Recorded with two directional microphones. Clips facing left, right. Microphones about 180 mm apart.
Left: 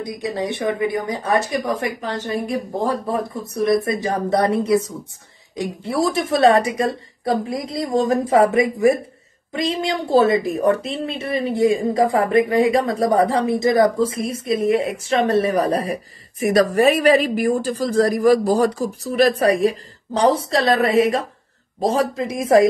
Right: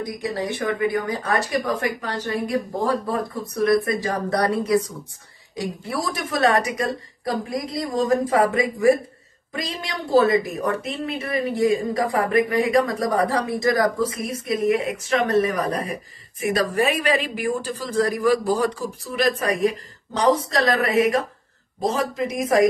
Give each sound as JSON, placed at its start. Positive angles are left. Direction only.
{"t": 0.0, "sound": "a woman's voice", "side_deg": 20}